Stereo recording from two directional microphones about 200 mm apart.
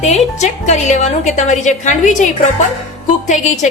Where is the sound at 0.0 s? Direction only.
35° left (ahead or behind).